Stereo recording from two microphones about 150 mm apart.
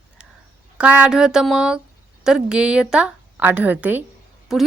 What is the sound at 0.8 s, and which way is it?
A woman's voice, 5° right (ahead or behind).